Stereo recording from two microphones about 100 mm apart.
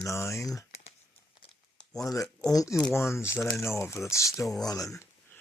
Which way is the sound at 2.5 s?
35° left (ahead or behind).